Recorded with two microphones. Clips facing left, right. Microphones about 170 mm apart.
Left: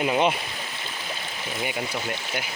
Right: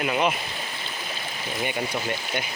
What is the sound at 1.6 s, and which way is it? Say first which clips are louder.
Speech: right 2 dB; 5° left (ahead or behind).